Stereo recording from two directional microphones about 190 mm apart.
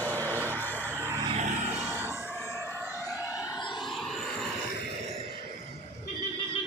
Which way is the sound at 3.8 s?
Centre (ahead or behind).